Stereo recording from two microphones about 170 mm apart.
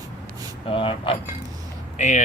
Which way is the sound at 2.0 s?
45° left (ahead or behind).